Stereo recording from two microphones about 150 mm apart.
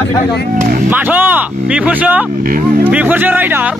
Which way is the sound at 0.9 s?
10° right (ahead or behind).